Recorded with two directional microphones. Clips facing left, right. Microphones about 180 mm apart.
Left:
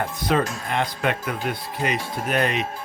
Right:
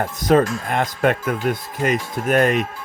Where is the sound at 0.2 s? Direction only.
45° right (ahead or behind).